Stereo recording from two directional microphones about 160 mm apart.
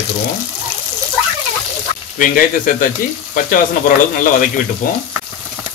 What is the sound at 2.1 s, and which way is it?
Speech, 60° left (ahead or behind).